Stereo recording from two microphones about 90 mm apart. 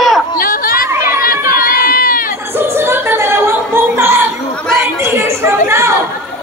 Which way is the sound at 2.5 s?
25° right (ahead or behind).